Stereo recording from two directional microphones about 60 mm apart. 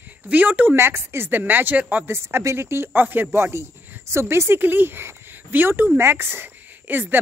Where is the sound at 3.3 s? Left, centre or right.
Right.